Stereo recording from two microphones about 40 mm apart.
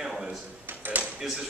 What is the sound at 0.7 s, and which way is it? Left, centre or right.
Ping, right.